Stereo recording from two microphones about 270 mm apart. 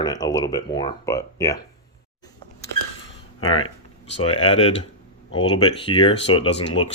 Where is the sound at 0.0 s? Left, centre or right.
Centre.